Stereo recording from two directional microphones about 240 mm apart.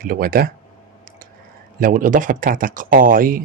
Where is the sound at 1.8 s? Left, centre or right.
Right.